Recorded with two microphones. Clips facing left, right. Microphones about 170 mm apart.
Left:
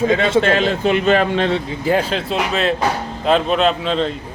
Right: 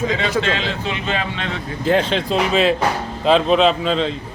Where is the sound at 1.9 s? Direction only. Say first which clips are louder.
Right 1 dB; 5° left (ahead or behind).